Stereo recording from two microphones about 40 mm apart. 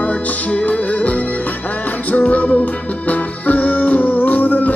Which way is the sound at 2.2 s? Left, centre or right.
Left.